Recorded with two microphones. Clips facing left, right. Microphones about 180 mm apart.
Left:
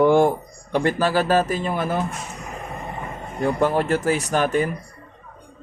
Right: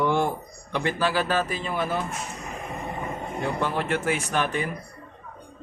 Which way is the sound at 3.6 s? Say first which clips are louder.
Left 7 dB; 40° left (ahead or behind).